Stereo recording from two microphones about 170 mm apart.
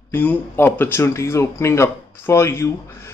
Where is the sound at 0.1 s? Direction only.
10° left (ahead or behind).